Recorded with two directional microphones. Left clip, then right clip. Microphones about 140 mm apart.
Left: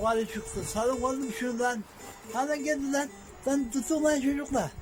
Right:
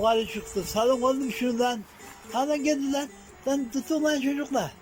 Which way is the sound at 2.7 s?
5° right (ahead or behind).